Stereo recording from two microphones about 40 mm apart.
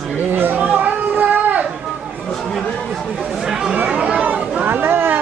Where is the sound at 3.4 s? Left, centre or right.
Centre.